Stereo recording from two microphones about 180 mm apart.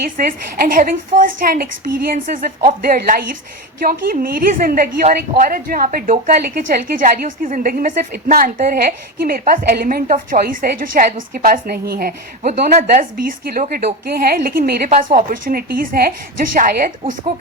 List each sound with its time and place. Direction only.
0.6 s a woman's voice: 50° right (ahead or behind)